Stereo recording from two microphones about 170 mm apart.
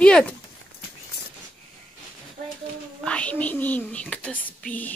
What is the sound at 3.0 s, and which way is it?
Whispering, 5° left (ahead or behind).